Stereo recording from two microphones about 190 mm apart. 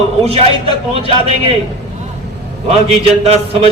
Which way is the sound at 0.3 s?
30° right (ahead or behind).